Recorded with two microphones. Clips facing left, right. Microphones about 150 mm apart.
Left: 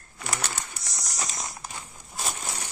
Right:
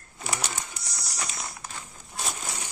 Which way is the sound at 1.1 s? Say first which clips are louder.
Left 1 dB; 35° left (ahead or behind).